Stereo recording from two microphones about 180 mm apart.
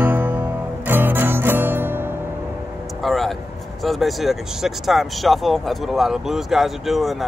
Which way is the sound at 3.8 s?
Centre (ahead or behind).